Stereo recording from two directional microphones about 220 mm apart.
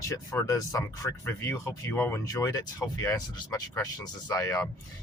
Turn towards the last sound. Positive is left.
turn(degrees=15)  # may be behind; listen again after turning